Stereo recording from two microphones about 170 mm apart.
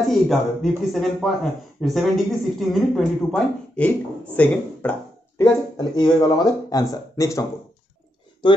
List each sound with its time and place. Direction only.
0.1 s speech: centre (ahead or behind)
5.4 s speech: 25° left (ahead or behind)
8.4 s speech: 30° left (ahead or behind)